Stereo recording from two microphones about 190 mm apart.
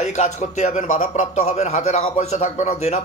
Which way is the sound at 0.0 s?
40° left (ahead or behind).